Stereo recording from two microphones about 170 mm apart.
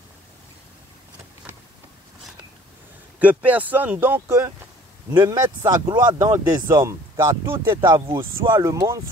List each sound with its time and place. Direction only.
3.2 s speech: 10° right (ahead or behind)